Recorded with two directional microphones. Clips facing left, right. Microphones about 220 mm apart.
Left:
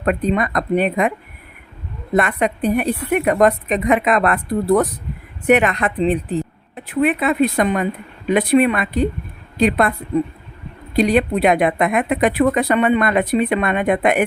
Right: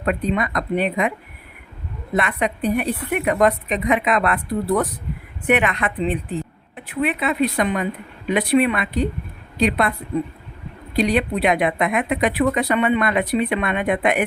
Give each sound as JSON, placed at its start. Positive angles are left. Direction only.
{"t": 0.0, "sound": "speech", "side_deg": 45}
{"t": 2.1, "sound": "speech", "side_deg": 45}
{"t": 10.9, "sound": "speech", "side_deg": 45}